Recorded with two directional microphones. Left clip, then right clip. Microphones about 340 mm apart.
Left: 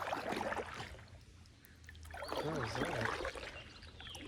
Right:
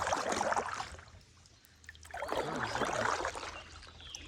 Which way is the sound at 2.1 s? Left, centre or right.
Right.